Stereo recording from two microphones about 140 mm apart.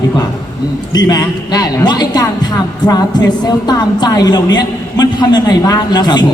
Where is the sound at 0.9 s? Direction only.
25° left (ahead or behind).